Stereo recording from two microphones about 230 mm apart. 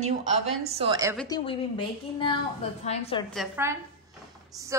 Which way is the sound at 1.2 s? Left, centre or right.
Centre.